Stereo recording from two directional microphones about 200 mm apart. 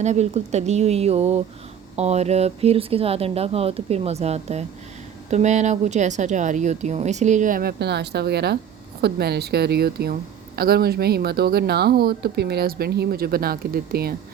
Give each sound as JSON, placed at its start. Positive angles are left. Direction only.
{"t": 0.0, "sound": "a woman's voice", "side_deg": -35}